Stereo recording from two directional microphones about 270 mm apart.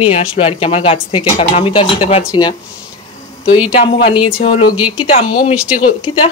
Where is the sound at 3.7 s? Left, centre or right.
Left.